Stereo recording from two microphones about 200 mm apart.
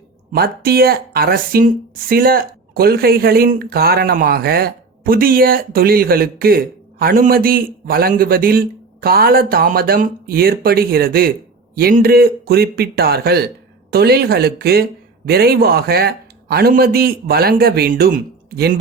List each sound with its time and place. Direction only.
0.3 s speech: 50° right (ahead or behind)